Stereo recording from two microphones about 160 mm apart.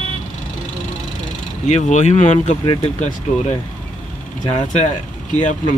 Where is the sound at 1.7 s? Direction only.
45° left (ahead or behind).